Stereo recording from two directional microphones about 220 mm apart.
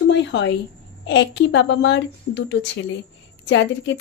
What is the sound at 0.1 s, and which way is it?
A woman's voice, 55° left (ahead or behind).